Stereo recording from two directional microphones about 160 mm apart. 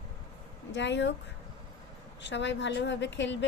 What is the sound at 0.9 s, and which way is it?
Speech, 90° left.